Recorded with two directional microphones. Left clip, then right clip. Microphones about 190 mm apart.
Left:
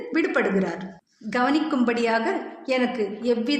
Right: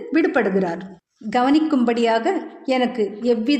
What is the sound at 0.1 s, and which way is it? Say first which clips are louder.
A woman's voice: right 4 dB; 50° right (ahead or behind).